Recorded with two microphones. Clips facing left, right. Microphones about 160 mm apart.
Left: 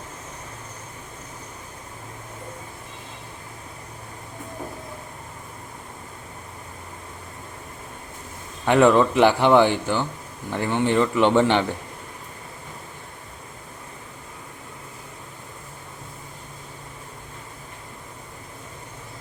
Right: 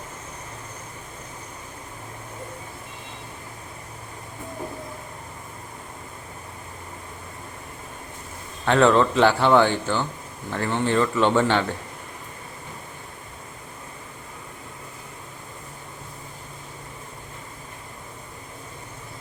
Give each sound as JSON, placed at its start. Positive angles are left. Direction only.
{"t": 8.6, "sound": "speech", "side_deg": 15}